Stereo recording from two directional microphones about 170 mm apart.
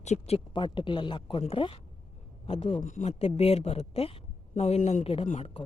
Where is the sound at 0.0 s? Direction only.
40° left (ahead or behind).